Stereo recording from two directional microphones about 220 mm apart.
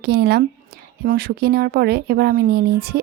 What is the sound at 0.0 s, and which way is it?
A woman's voice, 45° right (ahead or behind).